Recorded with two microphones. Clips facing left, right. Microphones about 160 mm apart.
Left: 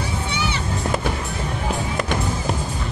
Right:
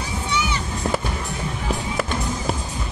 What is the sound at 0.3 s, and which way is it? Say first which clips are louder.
Music: right 5 dB; 60° left (ahead or behind).